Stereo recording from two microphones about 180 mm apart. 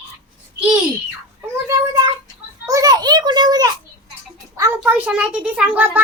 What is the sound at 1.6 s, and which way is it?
Cat, 20° right (ahead or behind).